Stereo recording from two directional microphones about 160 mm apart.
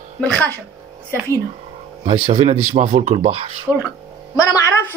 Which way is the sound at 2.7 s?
40° right (ahead or behind).